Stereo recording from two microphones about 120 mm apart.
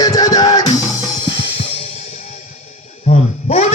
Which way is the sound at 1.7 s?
60° left (ahead or behind).